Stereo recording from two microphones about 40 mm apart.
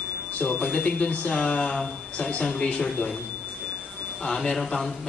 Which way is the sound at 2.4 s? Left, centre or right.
Left.